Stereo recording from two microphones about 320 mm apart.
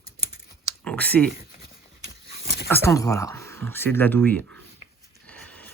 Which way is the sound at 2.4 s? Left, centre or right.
Left.